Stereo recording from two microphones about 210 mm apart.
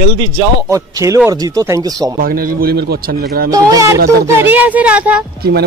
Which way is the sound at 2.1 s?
45° right (ahead or behind).